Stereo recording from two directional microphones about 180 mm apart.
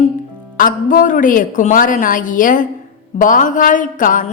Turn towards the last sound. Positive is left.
turn(degrees=45)  # may be behind; listen again after turning